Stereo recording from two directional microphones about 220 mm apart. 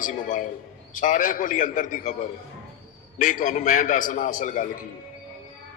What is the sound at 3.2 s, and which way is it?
A man's voice, 35° left (ahead or behind).